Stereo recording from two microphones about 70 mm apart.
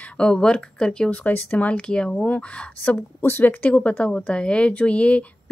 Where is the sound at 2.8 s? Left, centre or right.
Left.